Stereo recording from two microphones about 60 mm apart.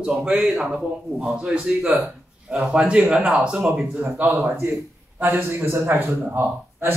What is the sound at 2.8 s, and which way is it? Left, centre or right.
A man's voice, centre.